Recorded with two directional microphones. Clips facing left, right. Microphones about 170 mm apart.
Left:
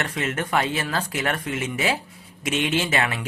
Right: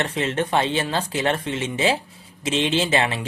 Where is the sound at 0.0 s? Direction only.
30° right (ahead or behind).